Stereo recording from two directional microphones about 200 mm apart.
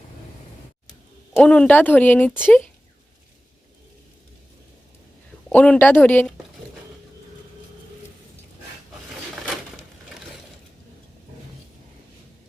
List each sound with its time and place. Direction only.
1.4 s speech: 5° left (ahead or behind)
5.5 s speech: 5° left (ahead or behind)